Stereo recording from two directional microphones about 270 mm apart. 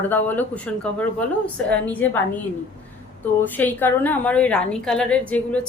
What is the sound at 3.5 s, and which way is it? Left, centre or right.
A woman's voice, centre.